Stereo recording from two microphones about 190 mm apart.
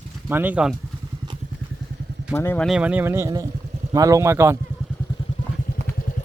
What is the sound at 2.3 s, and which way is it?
Speech, 15° left (ahead or behind).